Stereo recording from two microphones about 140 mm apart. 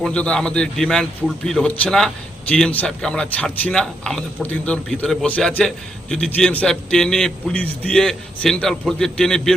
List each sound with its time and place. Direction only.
0.0 s a man's voice: 5° left (ahead or behind)